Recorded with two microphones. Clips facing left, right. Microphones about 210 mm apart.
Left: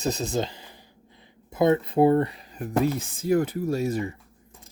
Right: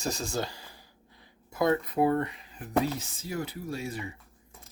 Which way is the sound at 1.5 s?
20° left (ahead or behind).